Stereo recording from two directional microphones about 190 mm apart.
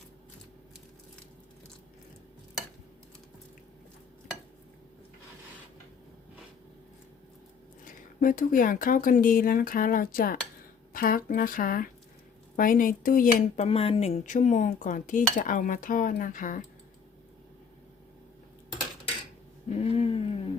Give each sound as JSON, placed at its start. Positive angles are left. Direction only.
{"t": 8.2, "sound": "speech", "side_deg": 45}
{"t": 13.7, "sound": "speech", "side_deg": 30}
{"t": 19.8, "sound": "a sound", "side_deg": 30}